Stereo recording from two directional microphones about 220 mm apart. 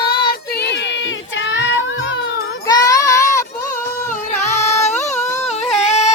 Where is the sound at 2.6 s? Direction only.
15° left (ahead or behind).